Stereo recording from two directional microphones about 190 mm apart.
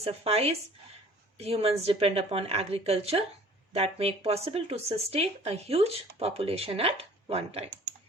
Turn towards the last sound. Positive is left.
turn(degrees=-30)  # may be behind; listen again after turning